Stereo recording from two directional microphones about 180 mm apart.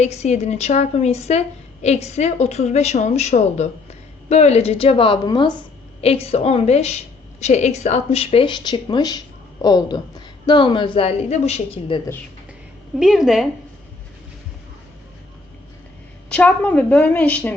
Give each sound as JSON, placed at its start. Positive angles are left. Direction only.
{"t": 0.0, "sound": "a woman's voice", "side_deg": 35}
{"t": 13.0, "sound": "a woman's voice", "side_deg": 0}
{"t": 16.3, "sound": "a woman's voice", "side_deg": 5}